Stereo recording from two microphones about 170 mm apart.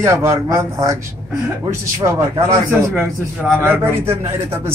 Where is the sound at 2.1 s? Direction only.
20° right (ahead or behind).